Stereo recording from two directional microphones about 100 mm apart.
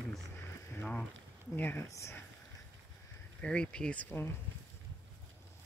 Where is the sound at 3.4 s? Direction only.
10° left (ahead or behind).